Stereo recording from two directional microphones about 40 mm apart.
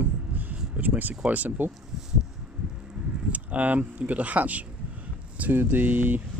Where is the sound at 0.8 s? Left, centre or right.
Right.